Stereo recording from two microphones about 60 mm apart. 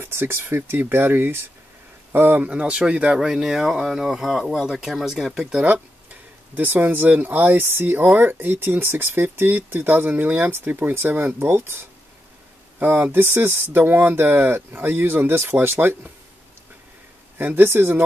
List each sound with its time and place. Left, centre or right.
0.0 s speech: right
2.4 s speech: centre
6.5 s speech: right
13.7 s speech: right
17.4 s speech: right